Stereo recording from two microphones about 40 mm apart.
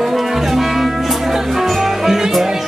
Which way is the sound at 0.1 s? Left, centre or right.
Centre.